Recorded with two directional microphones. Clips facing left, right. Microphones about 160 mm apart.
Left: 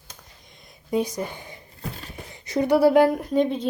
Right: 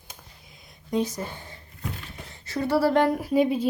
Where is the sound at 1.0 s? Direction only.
15° left (ahead or behind).